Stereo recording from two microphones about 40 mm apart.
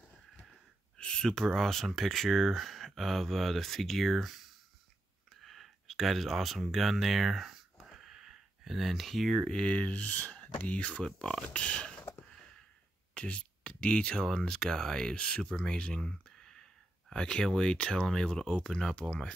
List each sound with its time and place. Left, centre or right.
0.9 s speech: left; by 7.6 s centre
7.8 s a sound: centre
9.7 s speech: left
11.1 s speech: centre
11.4 s speech: left
13.1 s speech: left
15.8 s a sound: centre
17.1 s speech: left